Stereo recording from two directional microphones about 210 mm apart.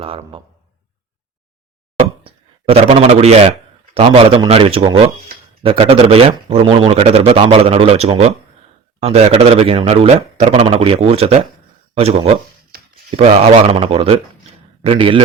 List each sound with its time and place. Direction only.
0.0 s speech: 25° right (ahead or behind)
2.0 s a sound: 30° right (ahead or behind)
3.9 s speech: 25° right (ahead or behind)